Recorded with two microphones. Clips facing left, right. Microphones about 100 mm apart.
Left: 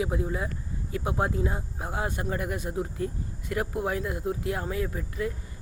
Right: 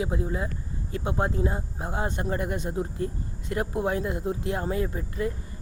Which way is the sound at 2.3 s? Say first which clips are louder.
Right 3 dB; 30° right (ahead or behind).